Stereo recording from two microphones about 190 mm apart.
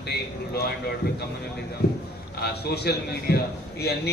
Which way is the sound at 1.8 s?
60° left (ahead or behind).